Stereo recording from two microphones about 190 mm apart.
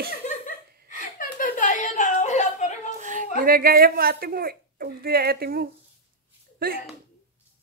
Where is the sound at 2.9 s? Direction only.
40° right (ahead or behind).